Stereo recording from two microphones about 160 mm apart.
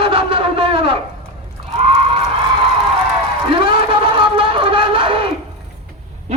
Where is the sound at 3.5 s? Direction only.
35° right (ahead or behind).